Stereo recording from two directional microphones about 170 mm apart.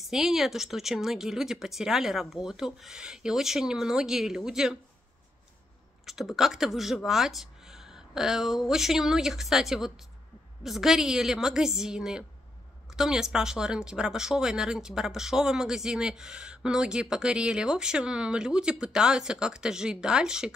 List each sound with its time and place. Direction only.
0.0 s speech: centre (ahead or behind)
6.0 s speech: centre (ahead or behind)